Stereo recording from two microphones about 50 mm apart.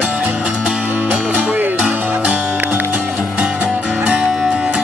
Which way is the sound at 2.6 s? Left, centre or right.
Right.